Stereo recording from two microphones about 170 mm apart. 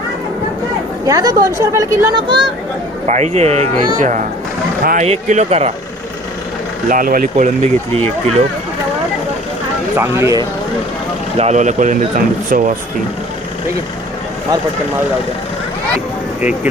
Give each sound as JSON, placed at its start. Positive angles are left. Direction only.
{"t": 1.0, "sound": "speech", "side_deg": -20}
{"t": 3.1, "sound": "speech", "side_deg": -40}
{"t": 5.0, "sound": "speech", "side_deg": -40}
{"t": 6.8, "sound": "speech", "side_deg": -55}
{"t": 10.0, "sound": "speech", "side_deg": -15}
{"t": 11.3, "sound": "speech", "side_deg": -40}